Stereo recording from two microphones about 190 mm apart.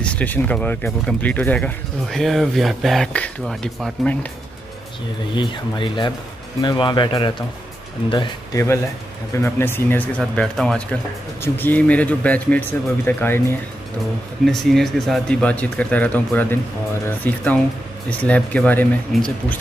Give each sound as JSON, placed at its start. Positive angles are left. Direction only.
{"t": 0.0, "sound": "speech", "side_deg": 5}
{"t": 5.3, "sound": "speech", "side_deg": 25}